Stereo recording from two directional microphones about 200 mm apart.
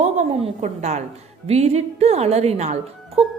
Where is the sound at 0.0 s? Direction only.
35° right (ahead or behind).